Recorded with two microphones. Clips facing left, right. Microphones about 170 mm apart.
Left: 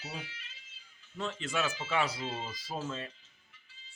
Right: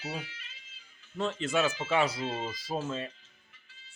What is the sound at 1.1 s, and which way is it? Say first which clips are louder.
Speech: right 5 dB; 25° right (ahead or behind).